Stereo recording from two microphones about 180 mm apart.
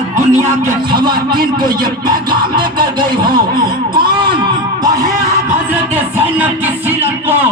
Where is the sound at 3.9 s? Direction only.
25° right (ahead or behind).